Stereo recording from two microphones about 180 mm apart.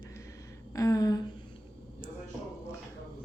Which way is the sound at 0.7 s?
20° left (ahead or behind).